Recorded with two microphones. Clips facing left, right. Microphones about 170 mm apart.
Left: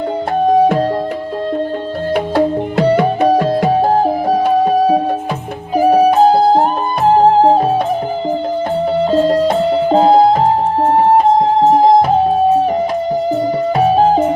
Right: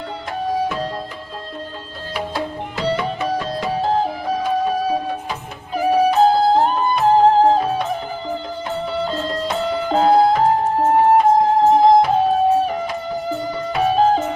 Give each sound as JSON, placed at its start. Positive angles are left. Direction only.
{"t": 2.1, "sound": "music", "side_deg": 60}
{"t": 9.0, "sound": "music", "side_deg": 40}
{"t": 13.7, "sound": "music", "side_deg": 40}